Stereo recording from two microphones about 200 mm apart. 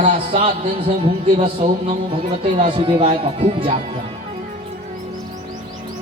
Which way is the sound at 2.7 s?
25° right (ahead or behind).